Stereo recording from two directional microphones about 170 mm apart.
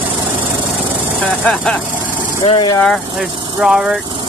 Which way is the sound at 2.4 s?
25° left (ahead or behind).